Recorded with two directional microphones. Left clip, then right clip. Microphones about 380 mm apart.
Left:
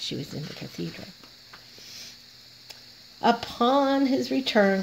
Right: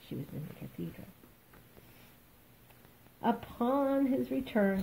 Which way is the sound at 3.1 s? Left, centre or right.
Left.